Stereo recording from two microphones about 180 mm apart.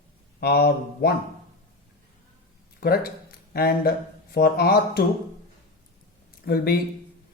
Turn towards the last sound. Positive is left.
turn(degrees=60)  # may be behind; listen again after turning